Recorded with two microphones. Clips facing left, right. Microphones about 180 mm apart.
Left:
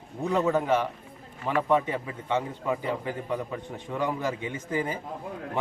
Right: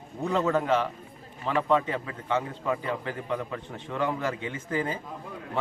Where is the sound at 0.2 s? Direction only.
10° left (ahead or behind).